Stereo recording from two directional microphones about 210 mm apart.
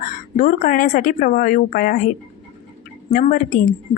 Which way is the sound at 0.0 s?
40° left (ahead or behind).